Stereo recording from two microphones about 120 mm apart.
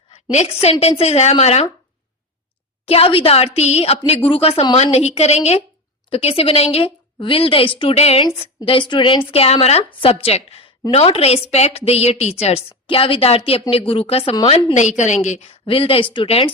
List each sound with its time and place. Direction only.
0.1 s a woman's voice: 65° left (ahead or behind)
2.8 s a woman's voice: 55° left (ahead or behind)
7.9 s a woman's voice: 60° left (ahead or behind)
8.4 s a woman's voice: 50° left (ahead or behind)
14.4 s a woman's voice: 70° left (ahead or behind); by 16.5 s 50° left (ahead or behind)